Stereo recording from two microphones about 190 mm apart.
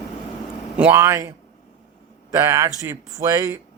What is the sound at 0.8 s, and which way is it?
Speech, 10° right (ahead or behind).